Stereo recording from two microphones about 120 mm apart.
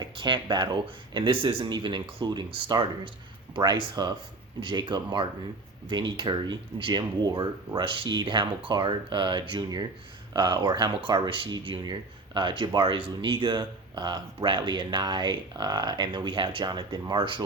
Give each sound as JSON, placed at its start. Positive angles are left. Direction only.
{"t": 0.0, "sound": "speech", "side_deg": -40}